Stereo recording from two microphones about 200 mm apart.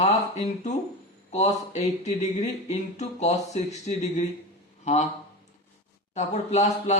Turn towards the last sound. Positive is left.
turn(degrees=35)  # may be behind; listen again after turning